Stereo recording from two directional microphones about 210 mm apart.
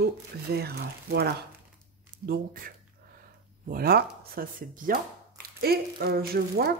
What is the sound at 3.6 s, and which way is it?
Speech, 45° right (ahead or behind).